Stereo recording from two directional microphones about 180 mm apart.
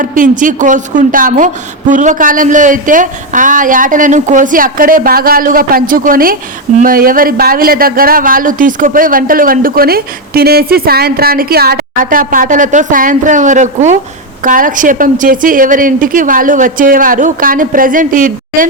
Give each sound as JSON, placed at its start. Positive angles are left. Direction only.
{"t": 0.0, "sound": "speech", "side_deg": -45}